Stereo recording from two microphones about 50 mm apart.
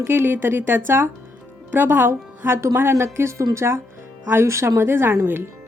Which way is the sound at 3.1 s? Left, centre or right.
Right.